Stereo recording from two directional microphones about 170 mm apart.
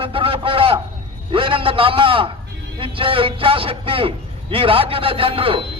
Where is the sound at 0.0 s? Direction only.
30° right (ahead or behind).